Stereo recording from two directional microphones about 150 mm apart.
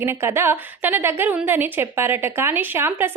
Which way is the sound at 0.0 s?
15° right (ahead or behind).